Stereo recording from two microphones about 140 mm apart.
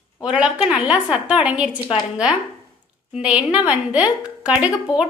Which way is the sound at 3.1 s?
10° right (ahead or behind).